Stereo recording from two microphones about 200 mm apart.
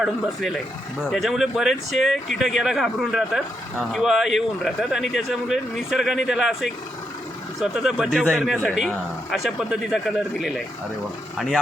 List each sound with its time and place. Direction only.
0.0 s speech: centre (ahead or behind)